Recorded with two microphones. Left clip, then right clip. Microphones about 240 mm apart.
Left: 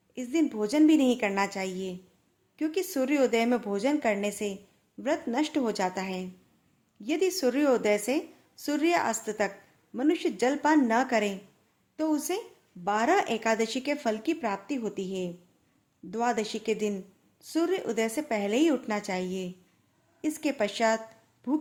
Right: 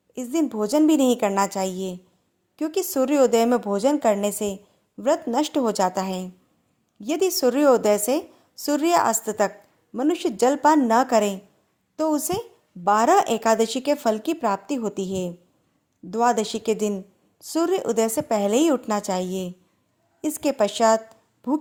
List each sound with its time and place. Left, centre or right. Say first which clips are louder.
0.1 s speech: right 4 dB; right